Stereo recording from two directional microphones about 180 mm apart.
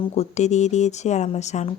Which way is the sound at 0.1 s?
35° left (ahead or behind).